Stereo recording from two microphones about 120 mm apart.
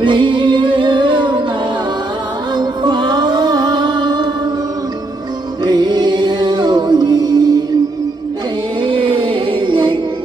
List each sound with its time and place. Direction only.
0.0 s music: 40° right (ahead or behind)
2.5 s music: 35° right (ahead or behind)
5.6 s music: 35° right (ahead or behind)
8.8 s music: 45° right (ahead or behind)